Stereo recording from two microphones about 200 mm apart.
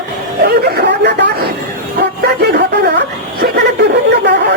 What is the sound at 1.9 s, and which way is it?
Bow-wow, 55° right (ahead or behind).